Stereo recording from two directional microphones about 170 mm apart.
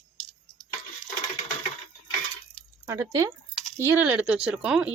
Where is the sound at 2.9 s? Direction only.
15° right (ahead or behind).